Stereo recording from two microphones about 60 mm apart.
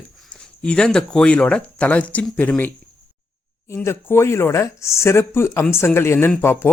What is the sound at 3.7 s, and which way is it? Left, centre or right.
Speech, left.